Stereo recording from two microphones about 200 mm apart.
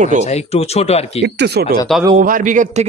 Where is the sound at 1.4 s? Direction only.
55° right (ahead or behind).